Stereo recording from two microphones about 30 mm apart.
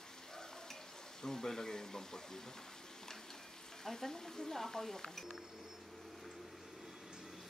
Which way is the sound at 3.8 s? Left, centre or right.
Centre.